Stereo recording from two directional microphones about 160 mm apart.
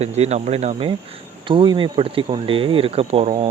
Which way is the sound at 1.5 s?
30° right (ahead or behind).